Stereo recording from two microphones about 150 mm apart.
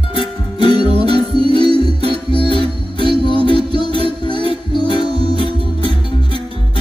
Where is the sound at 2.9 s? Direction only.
30° left (ahead or behind).